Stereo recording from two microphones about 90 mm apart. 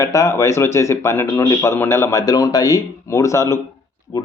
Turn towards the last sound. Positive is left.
turn(degrees=45)  # may be behind; listen again after turning